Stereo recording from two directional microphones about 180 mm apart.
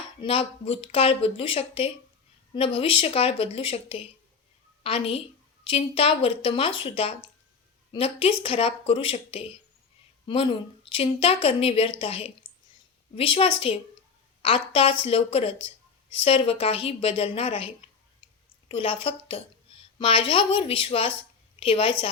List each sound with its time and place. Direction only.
0.2 s a woman's voice: 30° left (ahead or behind)